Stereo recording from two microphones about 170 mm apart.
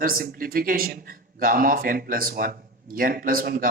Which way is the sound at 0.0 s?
55° right (ahead or behind).